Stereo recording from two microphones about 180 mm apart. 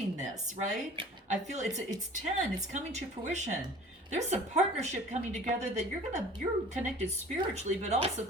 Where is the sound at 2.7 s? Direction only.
40° right (ahead or behind).